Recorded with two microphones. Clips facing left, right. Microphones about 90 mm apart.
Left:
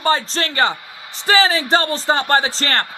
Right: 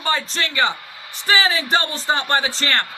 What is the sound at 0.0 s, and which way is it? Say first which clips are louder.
A man's voice: left 4 dB; 35° left (ahead or behind).